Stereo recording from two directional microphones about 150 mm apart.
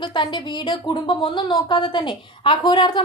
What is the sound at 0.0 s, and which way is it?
Speech, 30° left (ahead or behind).